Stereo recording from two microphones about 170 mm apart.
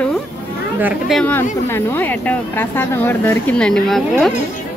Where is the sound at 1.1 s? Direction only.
10° left (ahead or behind).